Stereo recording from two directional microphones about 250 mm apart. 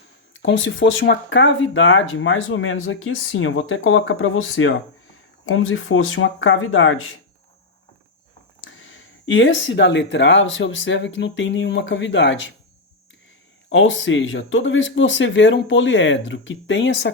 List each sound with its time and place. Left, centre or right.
0.4 s speech: left
8.6 s speech: left
13.7 s speech: left